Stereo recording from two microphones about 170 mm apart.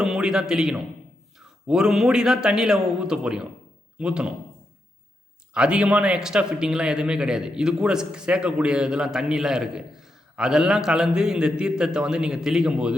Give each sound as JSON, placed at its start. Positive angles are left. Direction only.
{"t": 0.0, "sound": "a man's voice", "side_deg": -5}
{"t": 5.5, "sound": "a man's voice", "side_deg": -5}